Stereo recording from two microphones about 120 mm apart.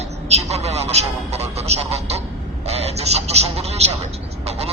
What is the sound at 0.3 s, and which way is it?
Speech, 65° right (ahead or behind).